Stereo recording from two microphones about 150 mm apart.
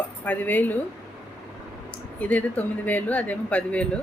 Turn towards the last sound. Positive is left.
turn(degrees=10)  # may be behind; listen again after turning